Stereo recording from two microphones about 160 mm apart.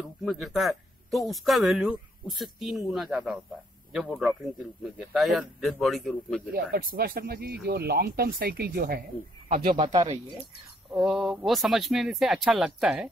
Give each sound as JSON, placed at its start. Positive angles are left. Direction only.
{"t": 0.0, "sound": "a man's voice", "side_deg": 0}
{"t": 6.5, "sound": "speech", "side_deg": -70}
{"t": 10.9, "sound": "a man's voice", "side_deg": 0}